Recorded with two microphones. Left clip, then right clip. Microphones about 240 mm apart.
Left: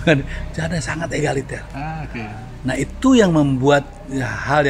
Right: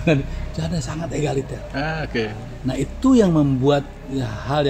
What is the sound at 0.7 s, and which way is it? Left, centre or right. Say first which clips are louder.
Speech: left 5 dB; left.